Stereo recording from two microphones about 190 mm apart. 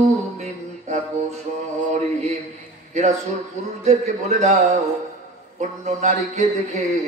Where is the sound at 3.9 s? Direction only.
35° right (ahead or behind).